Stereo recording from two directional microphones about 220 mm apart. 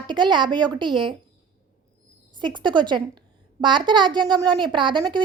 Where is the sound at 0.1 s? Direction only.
20° right (ahead or behind).